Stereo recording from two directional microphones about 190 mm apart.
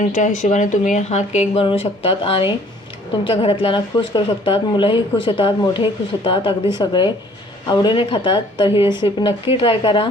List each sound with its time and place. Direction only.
0.1 s a woman's voice: 40° left (ahead or behind)